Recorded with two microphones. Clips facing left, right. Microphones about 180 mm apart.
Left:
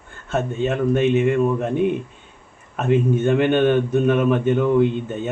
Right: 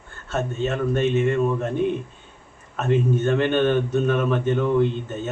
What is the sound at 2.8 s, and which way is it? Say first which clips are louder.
A man's voice: left 3 dB; 15° left (ahead or behind).